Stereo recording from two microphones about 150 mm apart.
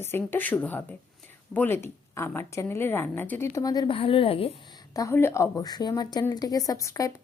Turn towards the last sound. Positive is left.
turn(degrees=20)  # may be behind; listen again after turning